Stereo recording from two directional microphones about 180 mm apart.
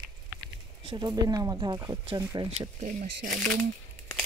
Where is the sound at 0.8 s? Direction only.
25° right (ahead or behind).